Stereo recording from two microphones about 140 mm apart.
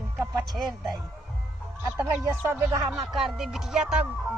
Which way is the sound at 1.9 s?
20° right (ahead or behind).